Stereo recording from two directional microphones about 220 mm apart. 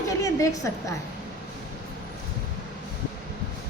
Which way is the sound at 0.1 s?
15° left (ahead or behind).